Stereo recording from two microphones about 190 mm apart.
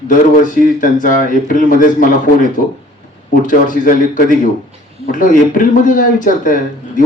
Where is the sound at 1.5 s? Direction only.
45° left (ahead or behind).